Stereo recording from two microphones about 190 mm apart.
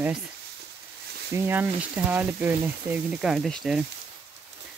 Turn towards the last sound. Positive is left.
turn(degrees=0)  # may be behind; listen again after turning